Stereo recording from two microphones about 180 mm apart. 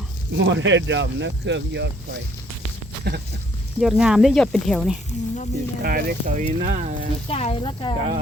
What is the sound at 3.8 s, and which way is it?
Speech, 5° right (ahead or behind).